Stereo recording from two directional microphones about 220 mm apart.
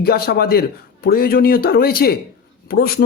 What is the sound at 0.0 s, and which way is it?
Speech, 45° left (ahead or behind).